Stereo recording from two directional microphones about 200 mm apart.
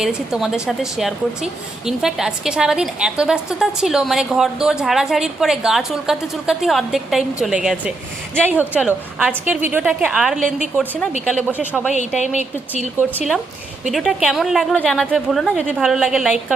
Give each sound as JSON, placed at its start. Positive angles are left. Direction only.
{"t": 0.0, "sound": "a woman's voice", "side_deg": -5}
{"t": 11.9, "sound": "speech", "side_deg": 35}
{"t": 13.0, "sound": "a woman's voice", "side_deg": -5}